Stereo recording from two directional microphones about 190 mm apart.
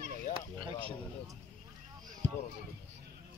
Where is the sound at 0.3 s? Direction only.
30° right (ahead or behind).